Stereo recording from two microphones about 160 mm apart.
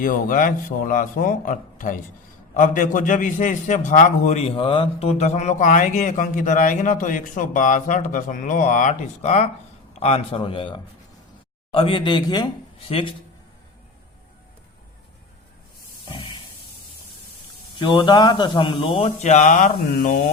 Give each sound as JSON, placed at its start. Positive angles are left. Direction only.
{"t": 0.0, "sound": "a man's voice", "side_deg": 55}
{"t": 16.0, "sound": "a sound", "side_deg": 30}
{"t": 17.7, "sound": "a man's voice", "side_deg": 30}